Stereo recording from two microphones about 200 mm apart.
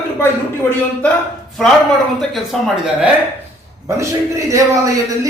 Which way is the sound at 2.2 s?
Centre (ahead or behind).